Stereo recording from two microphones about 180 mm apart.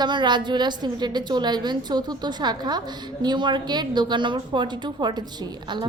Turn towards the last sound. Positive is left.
turn(degrees=-25)  # may be behind; listen again after turning